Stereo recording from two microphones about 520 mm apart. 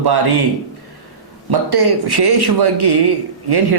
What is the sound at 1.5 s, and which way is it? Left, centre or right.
Speech, right.